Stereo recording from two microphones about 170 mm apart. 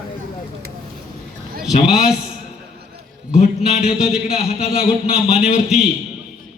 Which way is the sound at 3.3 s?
40° left (ahead or behind).